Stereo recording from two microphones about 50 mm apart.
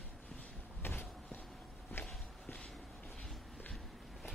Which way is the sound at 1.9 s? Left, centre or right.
Left.